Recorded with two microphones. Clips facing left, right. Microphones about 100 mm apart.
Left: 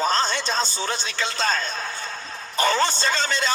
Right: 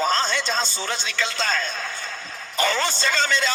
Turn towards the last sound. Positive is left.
turn(degrees=40)  # may be behind; listen again after turning